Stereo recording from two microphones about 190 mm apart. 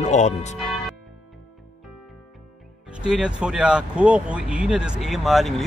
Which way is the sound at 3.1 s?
5° right (ahead or behind).